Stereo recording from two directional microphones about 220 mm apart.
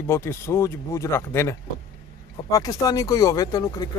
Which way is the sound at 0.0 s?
10° left (ahead or behind).